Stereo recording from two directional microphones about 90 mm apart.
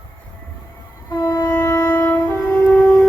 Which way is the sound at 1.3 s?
30° left (ahead or behind).